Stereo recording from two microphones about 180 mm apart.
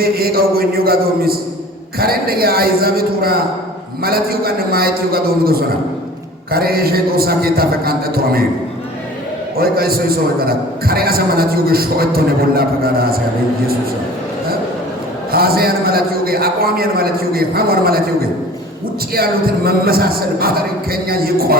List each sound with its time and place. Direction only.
0.0 s a man's voice: 55° right (ahead or behind)
9.6 s a man's voice: 55° right (ahead or behind)
15.3 s a man's voice: 55° right (ahead or behind)